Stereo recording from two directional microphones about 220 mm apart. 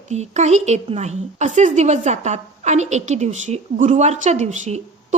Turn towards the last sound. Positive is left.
turn(degrees=-30)  # may be behind; listen again after turning